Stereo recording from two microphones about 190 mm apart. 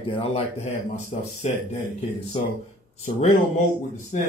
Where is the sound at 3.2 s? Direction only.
40° left (ahead or behind).